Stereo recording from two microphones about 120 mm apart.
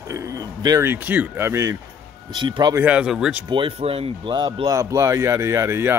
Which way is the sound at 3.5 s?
45° right (ahead or behind).